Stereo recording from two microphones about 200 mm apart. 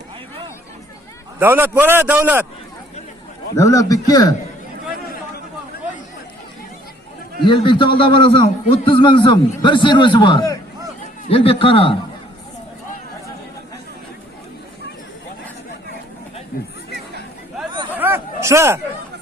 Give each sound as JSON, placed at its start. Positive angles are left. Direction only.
{"t": 1.4, "sound": "a man's voice", "side_deg": -10}
{"t": 3.5, "sound": "a man's voice", "side_deg": 15}
{"t": 7.4, "sound": "a man's voice", "side_deg": 25}
{"t": 17.8, "sound": "hubbub", "side_deg": -10}